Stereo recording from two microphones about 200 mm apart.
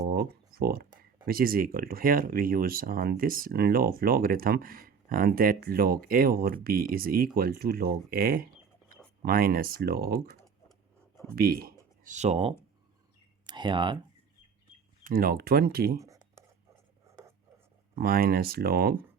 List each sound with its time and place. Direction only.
0.0 s speech: 45° right (ahead or behind)
11.3 s speech: 50° right (ahead or behind); by 14.0 s 25° right (ahead or behind)
15.0 s speech: 45° right (ahead or behind)
16.0 s a sound: 15° right (ahead or behind)
17.9 s speech: 50° right (ahead or behind)